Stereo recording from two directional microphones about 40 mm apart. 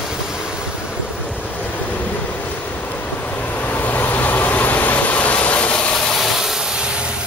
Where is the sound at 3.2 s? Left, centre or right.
Left.